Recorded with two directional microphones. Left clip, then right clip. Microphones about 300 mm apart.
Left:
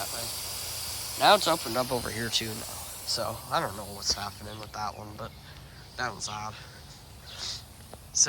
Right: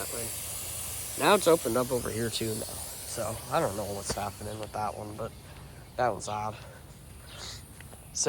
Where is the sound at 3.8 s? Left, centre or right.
Centre.